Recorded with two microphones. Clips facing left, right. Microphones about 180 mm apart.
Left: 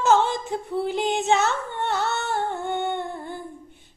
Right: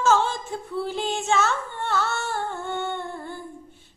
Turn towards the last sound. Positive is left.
turn(degrees=20)  # may be behind; listen again after turning